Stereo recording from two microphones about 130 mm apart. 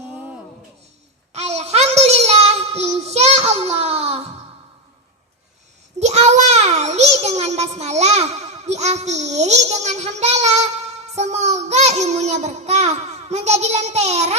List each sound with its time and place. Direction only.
1.3 s child singing: 55° right (ahead or behind)
6.0 s a child's voice: 55° right (ahead or behind)